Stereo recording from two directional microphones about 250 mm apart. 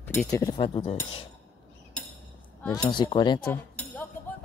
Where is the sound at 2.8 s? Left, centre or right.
Centre.